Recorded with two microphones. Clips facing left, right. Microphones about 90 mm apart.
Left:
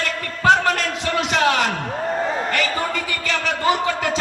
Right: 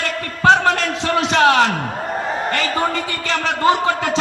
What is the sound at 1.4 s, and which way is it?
A man's voice, 35° right (ahead or behind).